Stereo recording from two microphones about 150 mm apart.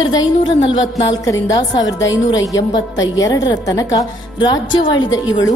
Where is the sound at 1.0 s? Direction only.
25° left (ahead or behind).